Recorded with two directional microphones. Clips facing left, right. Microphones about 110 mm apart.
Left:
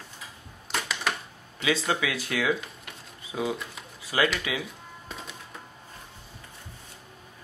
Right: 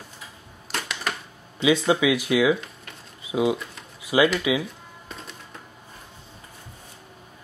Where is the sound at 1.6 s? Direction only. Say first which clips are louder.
Right 7 dB; 15° right (ahead or behind).